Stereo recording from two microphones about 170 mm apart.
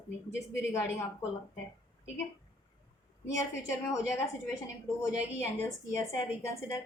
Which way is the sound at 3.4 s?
15° left (ahead or behind).